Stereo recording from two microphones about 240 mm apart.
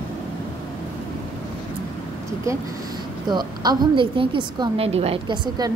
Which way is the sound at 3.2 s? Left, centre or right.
Centre.